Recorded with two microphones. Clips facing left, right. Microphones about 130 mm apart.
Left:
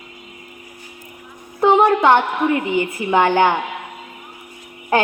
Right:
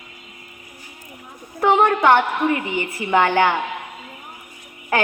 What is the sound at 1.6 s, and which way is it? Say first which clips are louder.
A woman's voice: left 3 dB; 20° left (ahead or behind).